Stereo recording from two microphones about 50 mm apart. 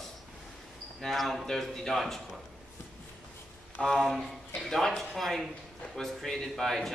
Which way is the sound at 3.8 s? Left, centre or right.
Centre.